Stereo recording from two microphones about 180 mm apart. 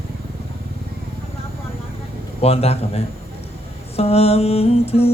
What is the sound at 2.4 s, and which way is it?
Humming, 35° left (ahead or behind).